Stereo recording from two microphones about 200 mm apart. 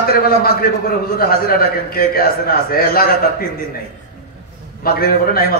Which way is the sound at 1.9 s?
50° left (ahead or behind).